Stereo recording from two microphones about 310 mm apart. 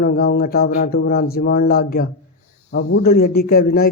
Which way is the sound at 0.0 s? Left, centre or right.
Left.